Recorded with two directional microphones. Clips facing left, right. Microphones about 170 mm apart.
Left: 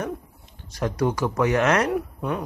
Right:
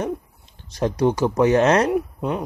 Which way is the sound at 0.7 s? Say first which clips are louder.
Right 4 dB; 25° right (ahead or behind).